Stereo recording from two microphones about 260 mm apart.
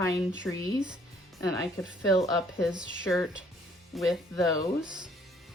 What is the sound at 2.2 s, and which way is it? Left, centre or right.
Speech, centre.